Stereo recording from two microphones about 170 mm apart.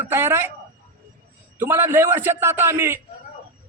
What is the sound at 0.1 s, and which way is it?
Speech, 15° right (ahead or behind).